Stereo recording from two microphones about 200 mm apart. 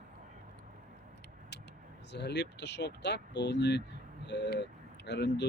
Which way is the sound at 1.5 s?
60° left (ahead or behind).